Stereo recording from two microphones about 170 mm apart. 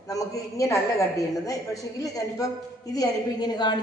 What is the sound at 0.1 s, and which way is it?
A woman's voice, 20° left (ahead or behind).